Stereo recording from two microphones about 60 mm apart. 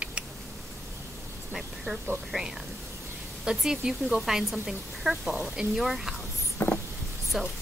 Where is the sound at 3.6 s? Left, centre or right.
Centre.